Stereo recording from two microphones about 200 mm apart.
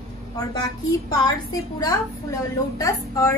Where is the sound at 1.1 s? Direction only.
20° left (ahead or behind).